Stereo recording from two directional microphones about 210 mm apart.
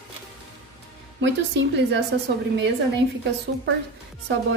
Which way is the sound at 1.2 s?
55° right (ahead or behind).